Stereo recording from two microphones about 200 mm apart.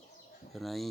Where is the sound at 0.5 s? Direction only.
Centre (ahead or behind).